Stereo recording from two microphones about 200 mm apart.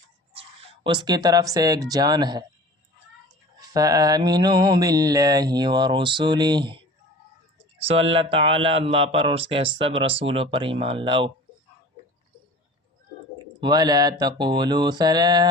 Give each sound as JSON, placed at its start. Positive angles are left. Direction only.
{"t": 0.3, "sound": "speech", "side_deg": -25}
{"t": 3.6, "sound": "speech", "side_deg": -20}
{"t": 13.6, "sound": "speech", "side_deg": -20}